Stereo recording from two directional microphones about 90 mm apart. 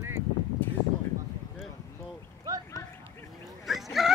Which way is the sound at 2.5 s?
40° right (ahead or behind).